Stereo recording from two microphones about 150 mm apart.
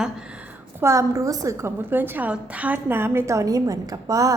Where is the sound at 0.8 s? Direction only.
20° right (ahead or behind).